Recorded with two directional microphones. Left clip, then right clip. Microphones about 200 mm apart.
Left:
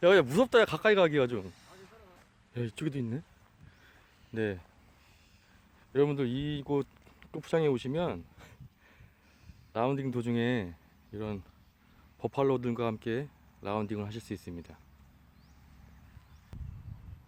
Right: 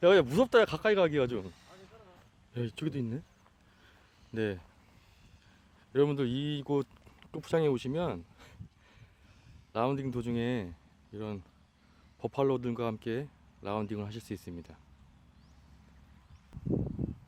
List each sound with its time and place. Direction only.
0.0 s speech: 15° left (ahead or behind)
1.5 s a sound: 50° left (ahead or behind)
2.5 s speech: 5° left (ahead or behind)
4.3 s speech: 5° left (ahead or behind)
5.9 s speech: centre (ahead or behind)
9.7 s speech: 10° left (ahead or behind)